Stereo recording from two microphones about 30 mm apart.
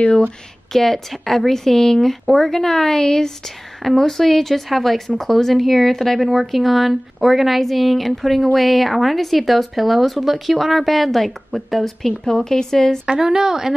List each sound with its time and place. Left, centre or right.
0.0 s speech: left
0.7 s speech: centre
13.0 s a woman's voice: right